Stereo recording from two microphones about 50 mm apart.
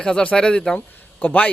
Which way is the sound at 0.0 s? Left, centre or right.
Centre.